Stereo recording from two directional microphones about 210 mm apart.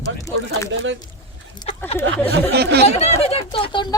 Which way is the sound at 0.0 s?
15° left (ahead or behind).